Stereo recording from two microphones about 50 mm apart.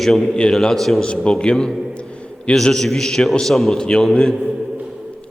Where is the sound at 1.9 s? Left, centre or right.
Left.